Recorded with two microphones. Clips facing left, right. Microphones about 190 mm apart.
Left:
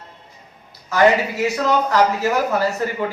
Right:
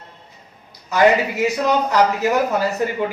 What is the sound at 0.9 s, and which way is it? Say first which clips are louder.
Speech: even; 15° right (ahead or behind).